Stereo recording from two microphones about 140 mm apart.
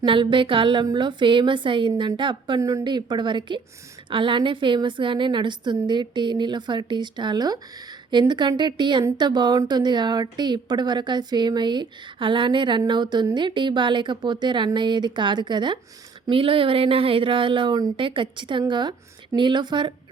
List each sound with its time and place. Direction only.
0.0 s a woman's voice: 35° right (ahead or behind)
2.6 s a woman's voice: 25° right (ahead or behind)